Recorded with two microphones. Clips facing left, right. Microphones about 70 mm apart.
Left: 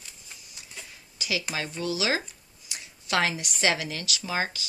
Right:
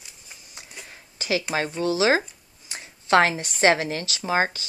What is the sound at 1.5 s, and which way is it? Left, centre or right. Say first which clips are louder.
A woman's voice: right 6 dB; right.